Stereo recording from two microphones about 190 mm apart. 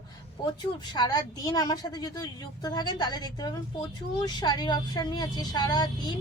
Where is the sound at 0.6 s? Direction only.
20° left (ahead or behind).